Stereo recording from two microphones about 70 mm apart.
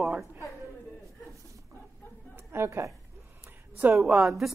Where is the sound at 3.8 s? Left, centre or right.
Right.